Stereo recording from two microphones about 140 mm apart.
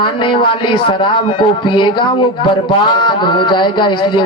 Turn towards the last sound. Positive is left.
turn(degrees=35)  # may be behind; listen again after turning